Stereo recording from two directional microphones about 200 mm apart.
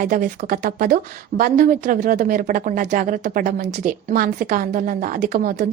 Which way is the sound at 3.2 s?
50° right (ahead or behind).